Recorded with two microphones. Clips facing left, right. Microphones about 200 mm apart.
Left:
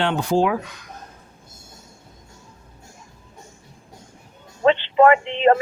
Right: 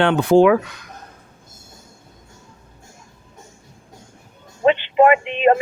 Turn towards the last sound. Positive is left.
turn(degrees=-15)  # may be behind; listen again after turning